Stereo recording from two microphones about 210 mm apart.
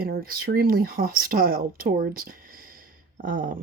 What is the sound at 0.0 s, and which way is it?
Speech, 45° right (ahead or behind).